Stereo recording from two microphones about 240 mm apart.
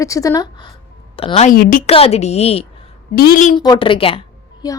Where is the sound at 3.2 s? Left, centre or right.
Left.